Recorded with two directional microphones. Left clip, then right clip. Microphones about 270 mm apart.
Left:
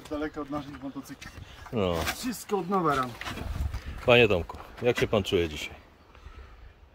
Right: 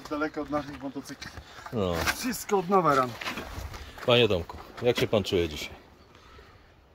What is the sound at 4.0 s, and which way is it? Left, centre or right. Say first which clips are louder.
Speech: left 2 dB; centre.